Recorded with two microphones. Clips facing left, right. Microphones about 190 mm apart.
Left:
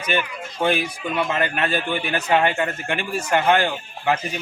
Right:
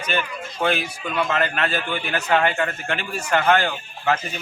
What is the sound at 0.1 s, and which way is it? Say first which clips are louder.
A man's voice: left 2 dB; 15° left (ahead or behind).